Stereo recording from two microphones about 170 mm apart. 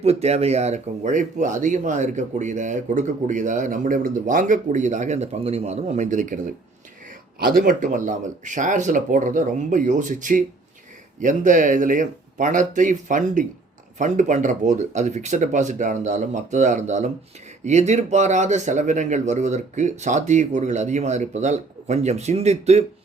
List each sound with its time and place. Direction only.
0.0 s speech: 40° right (ahead or behind)
7.4 s speech: 55° right (ahead or behind); by 22.8 s 40° right (ahead or behind)